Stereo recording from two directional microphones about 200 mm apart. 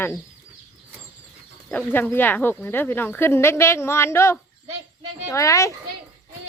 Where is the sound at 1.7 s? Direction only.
10° left (ahead or behind).